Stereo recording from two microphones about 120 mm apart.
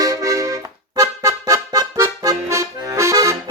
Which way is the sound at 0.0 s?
30° right (ahead or behind).